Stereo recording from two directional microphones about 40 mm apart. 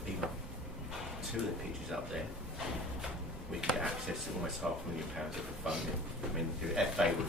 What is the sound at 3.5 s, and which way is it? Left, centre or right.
Speech, centre.